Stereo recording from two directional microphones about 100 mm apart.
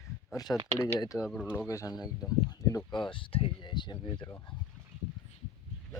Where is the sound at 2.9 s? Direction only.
50° left (ahead or behind).